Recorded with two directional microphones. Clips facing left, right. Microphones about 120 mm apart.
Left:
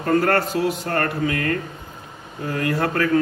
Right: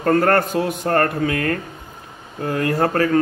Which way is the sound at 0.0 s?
50° right (ahead or behind).